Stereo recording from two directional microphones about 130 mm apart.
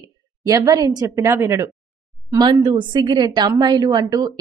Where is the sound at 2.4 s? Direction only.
35° right (ahead or behind).